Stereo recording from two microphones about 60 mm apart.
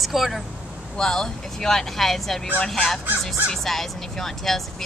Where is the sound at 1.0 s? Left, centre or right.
Centre.